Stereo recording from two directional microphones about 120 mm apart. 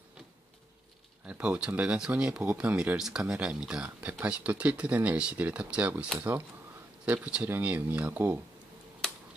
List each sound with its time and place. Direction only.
1.2 s speech: 10° right (ahead or behind)